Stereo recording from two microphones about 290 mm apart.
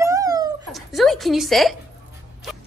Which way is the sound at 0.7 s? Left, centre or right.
Centre.